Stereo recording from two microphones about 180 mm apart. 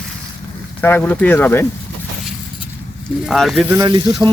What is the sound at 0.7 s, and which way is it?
Speech, 10° left (ahead or behind).